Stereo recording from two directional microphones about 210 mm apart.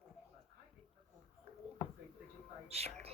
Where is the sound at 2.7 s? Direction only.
30° right (ahead or behind).